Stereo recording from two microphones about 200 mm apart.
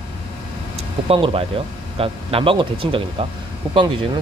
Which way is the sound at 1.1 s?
30° right (ahead or behind).